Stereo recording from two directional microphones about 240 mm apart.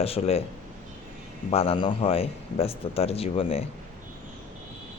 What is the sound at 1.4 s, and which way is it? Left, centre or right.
Speech, left.